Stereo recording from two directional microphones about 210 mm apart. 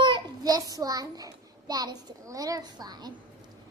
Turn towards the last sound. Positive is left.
turn(degrees=-20)  # may be behind; listen again after turning